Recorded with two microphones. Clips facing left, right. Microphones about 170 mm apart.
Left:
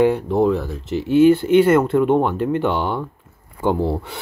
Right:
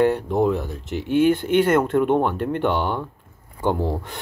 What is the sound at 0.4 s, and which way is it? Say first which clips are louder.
Speech: left 3 dB; centre (ahead or behind).